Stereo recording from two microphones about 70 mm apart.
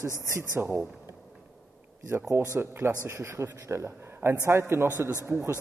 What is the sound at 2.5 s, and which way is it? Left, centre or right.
A man's voice, right.